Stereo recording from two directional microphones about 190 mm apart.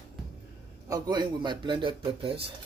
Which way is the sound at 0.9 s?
20° right (ahead or behind).